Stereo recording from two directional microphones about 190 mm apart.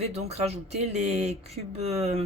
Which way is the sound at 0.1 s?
35° right (ahead or behind).